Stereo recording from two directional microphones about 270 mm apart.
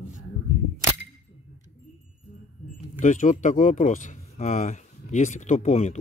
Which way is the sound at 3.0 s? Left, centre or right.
Left.